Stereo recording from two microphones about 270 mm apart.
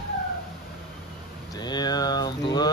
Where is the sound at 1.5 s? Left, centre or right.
Centre.